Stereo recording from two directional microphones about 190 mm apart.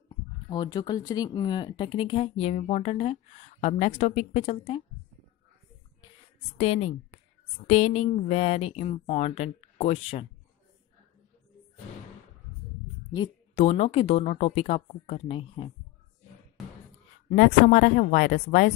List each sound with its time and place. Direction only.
0.5 s speech: 25° left (ahead or behind)
6.6 s speech: 35° left (ahead or behind)
13.6 s speech: 35° left (ahead or behind)
17.3 s a woman's voice: 45° left (ahead or behind)